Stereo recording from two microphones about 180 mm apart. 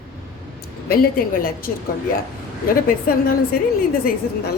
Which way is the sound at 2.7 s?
55° left (ahead or behind).